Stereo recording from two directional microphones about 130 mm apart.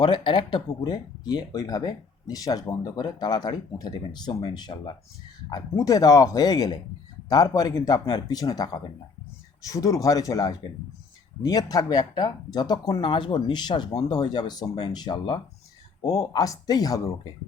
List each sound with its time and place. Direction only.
0.0 s speech: 35° left (ahead or behind)